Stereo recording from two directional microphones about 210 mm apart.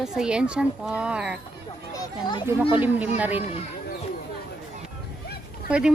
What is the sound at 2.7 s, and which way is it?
Speech, 10° right (ahead or behind).